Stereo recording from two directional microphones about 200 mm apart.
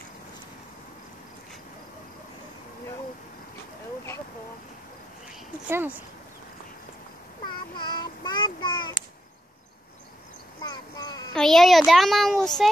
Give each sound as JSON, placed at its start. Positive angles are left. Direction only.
{"t": 5.7, "sound": "speech", "side_deg": -10}
{"t": 7.4, "sound": "child singing", "side_deg": 25}
{"t": 10.6, "sound": "speech", "side_deg": 20}
{"t": 11.3, "sound": "a child's voice", "side_deg": 0}